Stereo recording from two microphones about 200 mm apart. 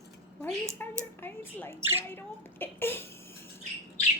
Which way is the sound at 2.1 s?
10° left (ahead or behind).